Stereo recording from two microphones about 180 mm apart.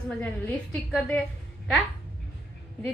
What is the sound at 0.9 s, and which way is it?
Speech, 5° left (ahead or behind).